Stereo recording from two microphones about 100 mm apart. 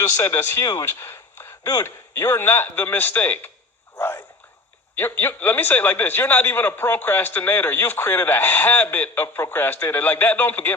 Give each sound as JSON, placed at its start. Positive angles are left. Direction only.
{"t": 0.2, "sound": "speech", "side_deg": 30}
{"t": 0.9, "sound": "a sound", "side_deg": 25}
{"t": 1.8, "sound": "a man's voice", "side_deg": 25}